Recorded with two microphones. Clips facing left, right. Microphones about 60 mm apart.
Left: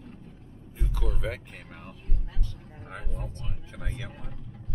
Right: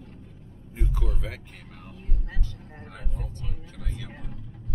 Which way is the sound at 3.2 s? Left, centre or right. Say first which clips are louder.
Even; left.